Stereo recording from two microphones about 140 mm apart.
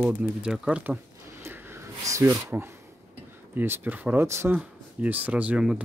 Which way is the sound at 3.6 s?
15° right (ahead or behind).